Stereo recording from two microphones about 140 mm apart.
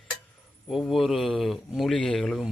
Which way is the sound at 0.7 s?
Centre (ahead or behind).